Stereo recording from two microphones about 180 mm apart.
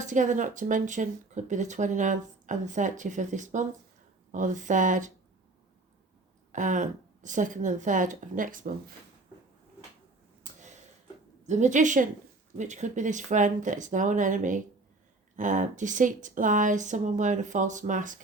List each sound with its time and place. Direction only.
0.0 s speech: 45° right (ahead or behind)
6.5 s speech: 45° right (ahead or behind)
10.5 s a sound: 45° right (ahead or behind)
11.4 s speech: 40° right (ahead or behind)